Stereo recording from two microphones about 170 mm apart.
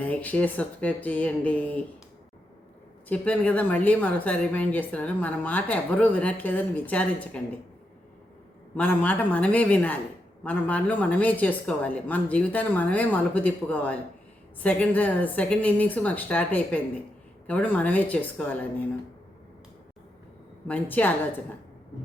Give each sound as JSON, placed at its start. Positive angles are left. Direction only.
{"t": 0.0, "sound": "a woman's voice", "side_deg": 10}
{"t": 3.1, "sound": "a woman's voice", "side_deg": 10}
{"t": 8.7, "sound": "a woman's voice", "side_deg": 10}
{"t": 20.7, "sound": "a woman's voice", "side_deg": 10}